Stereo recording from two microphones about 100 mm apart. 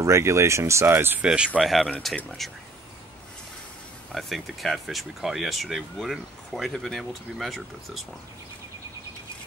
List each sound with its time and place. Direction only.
0.0 s speech: 30° right (ahead or behind)
1.2 s speech: 10° right (ahead or behind)
4.1 s speech: centre (ahead or behind)